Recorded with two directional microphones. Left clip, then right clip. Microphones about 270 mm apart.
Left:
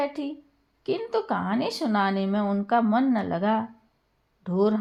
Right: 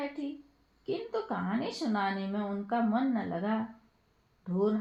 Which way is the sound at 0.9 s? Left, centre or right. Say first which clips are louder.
Left 8 dB; left.